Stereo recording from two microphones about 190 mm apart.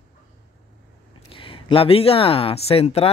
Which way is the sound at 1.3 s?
30° left (ahead or behind).